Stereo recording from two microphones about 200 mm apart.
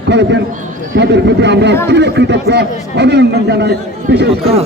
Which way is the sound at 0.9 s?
60° right (ahead or behind).